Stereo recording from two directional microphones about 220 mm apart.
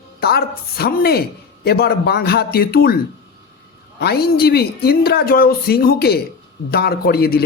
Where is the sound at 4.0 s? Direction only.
45° left (ahead or behind).